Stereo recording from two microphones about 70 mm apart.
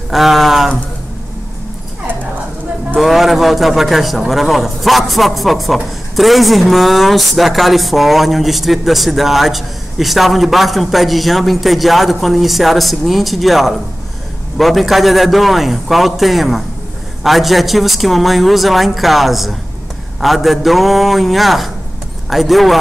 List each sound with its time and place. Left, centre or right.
0.1 s speech: centre
3.0 s speech: centre